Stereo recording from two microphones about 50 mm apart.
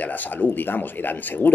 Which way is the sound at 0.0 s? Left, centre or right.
Left.